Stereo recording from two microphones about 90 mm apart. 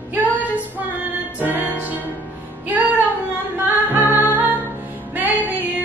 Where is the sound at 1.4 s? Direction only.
20° right (ahead or behind).